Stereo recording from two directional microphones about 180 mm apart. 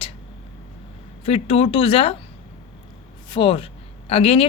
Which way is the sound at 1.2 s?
30° left (ahead or behind).